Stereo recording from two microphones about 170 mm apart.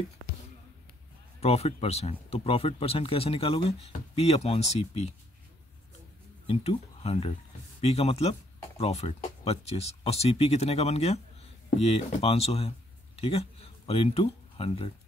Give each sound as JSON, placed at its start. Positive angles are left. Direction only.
{"t": 1.4, "sound": "speech", "side_deg": 35}
{"t": 6.4, "sound": "speech", "side_deg": 35}